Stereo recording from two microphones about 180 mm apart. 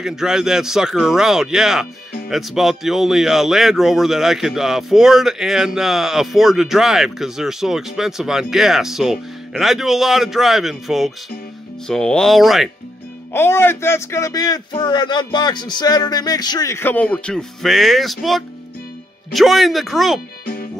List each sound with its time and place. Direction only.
0.0 s speech: 5° right (ahead or behind)
13.3 s speech: 10° left (ahead or behind)